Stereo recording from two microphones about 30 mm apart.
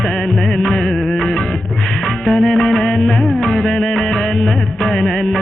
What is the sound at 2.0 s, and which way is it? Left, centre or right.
Music, centre.